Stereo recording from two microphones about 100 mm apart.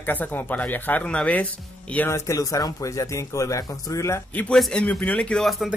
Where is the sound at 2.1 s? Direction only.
30° left (ahead or behind).